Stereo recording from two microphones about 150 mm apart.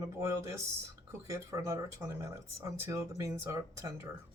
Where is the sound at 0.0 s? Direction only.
20° right (ahead or behind).